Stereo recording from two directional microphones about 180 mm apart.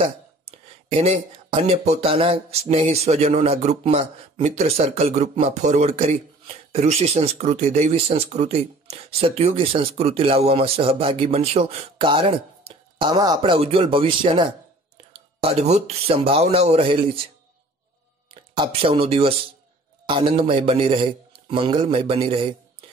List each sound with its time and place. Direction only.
0.0 s speech: 35° right (ahead or behind)
18.3 s a man's voice: 30° right (ahead or behind)